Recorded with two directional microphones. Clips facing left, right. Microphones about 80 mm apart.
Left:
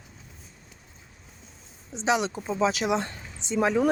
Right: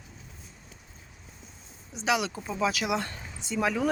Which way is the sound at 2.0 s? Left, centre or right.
Left.